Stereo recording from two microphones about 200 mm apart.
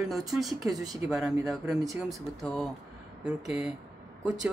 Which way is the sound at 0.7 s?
20° right (ahead or behind).